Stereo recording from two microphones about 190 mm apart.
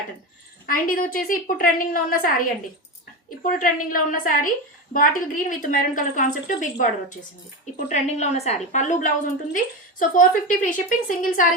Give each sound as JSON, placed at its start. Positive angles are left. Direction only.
{"t": 0.7, "sound": "a woman's voice", "side_deg": 50}
{"t": 3.4, "sound": "a woman's voice", "side_deg": 45}
{"t": 7.9, "sound": "a woman's voice", "side_deg": 35}